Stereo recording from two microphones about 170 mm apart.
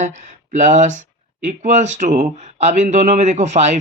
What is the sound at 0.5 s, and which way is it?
Speech, 45° right (ahead or behind).